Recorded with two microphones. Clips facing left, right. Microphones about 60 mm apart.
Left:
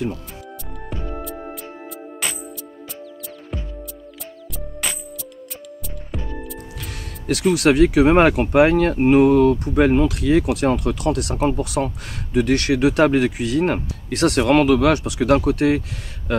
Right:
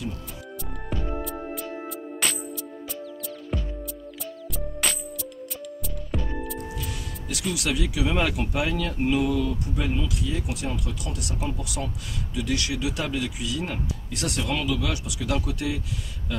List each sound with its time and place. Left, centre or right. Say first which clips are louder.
1.1 s music: left 1 dB; centre
4.6 s music: even; centre
6.1 s music: even; centre
6.8 s speech: left 1 dB; left